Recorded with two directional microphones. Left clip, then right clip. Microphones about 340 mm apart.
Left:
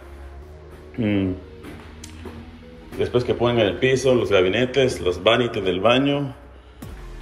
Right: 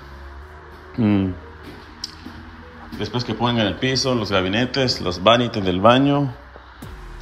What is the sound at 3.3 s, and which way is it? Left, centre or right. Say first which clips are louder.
Speech: right 1 dB; centre.